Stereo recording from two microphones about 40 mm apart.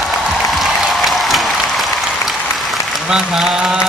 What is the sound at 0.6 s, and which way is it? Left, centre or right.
Applause, centre.